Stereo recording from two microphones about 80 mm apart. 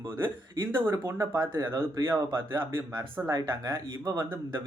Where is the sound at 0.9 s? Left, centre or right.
Right.